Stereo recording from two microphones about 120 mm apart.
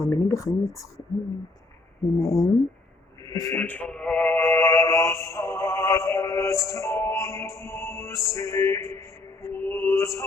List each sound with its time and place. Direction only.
0.0 s speech: 25° left (ahead or behind)
2.2 s a man's voice: 30° left (ahead or behind)
3.5 s music: 15° left (ahead or behind)